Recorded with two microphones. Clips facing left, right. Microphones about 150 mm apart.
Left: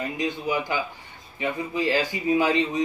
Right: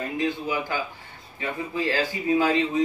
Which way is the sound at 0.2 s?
15° left (ahead or behind).